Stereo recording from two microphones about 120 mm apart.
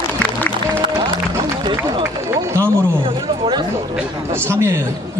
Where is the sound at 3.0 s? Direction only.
40° right (ahead or behind).